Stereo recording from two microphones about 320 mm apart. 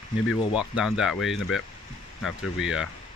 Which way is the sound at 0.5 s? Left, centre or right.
Centre.